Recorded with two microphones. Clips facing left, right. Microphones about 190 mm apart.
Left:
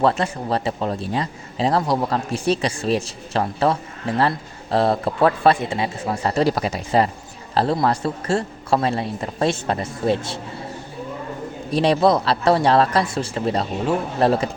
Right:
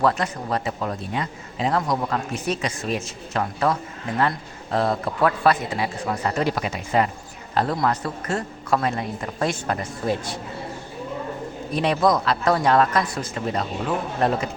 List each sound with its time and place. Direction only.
0.0 s speech: 30° left (ahead or behind)
11.7 s speech: 30° left (ahead or behind)